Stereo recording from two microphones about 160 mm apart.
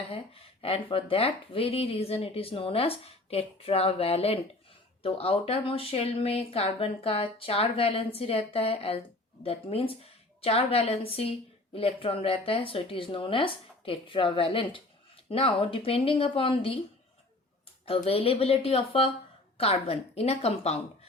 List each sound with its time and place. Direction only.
0.6 s speech: 35° left (ahead or behind)
17.8 s speech: 35° left (ahead or behind)